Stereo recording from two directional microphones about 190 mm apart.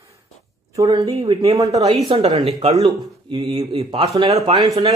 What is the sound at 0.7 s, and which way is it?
A man's voice, 20° right (ahead or behind).